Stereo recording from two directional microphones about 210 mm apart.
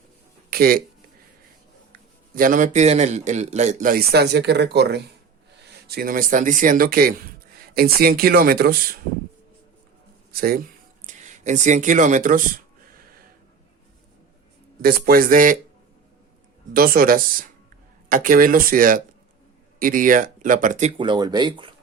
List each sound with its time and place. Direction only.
0.5 s speech: 45° right (ahead or behind)
1.9 s a man's voice: 40° right (ahead or behind)
10.3 s speech: 45° right (ahead or behind)
11.0 s speech: 35° right (ahead or behind)
14.8 s speech: 45° right (ahead or behind)
16.7 s a man's voice: 45° right (ahead or behind)
21.0 s speech: 20° right (ahead or behind)